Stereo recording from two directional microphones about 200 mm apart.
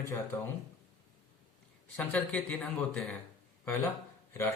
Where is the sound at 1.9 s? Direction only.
10° left (ahead or behind).